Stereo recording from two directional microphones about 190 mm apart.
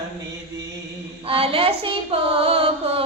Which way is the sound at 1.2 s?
30° right (ahead or behind).